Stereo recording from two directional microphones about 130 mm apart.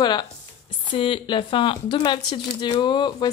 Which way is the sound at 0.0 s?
35° left (ahead or behind).